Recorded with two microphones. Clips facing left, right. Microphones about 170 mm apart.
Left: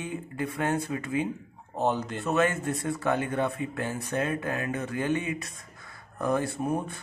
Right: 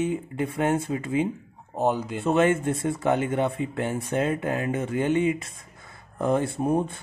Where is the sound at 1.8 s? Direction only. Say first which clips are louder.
Right 3 dB; 10° right (ahead or behind).